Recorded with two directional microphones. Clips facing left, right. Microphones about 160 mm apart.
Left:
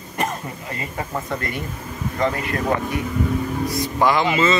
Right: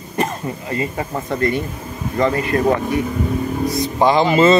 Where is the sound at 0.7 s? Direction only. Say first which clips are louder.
Right 5 dB; 25° right (ahead or behind).